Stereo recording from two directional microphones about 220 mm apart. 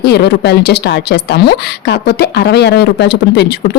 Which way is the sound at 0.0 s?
50° left (ahead or behind).